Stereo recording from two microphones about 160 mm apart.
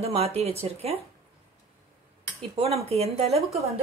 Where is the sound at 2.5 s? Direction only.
40° right (ahead or behind).